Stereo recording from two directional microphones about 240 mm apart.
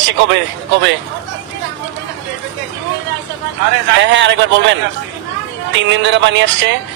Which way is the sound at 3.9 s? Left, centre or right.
Right.